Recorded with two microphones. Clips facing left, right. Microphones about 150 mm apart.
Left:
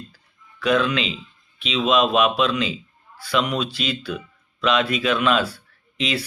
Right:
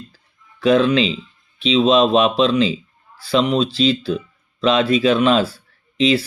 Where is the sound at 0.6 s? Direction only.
30° right (ahead or behind).